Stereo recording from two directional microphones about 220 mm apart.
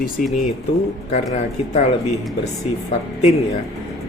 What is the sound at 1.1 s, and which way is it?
Speech, 30° left (ahead or behind).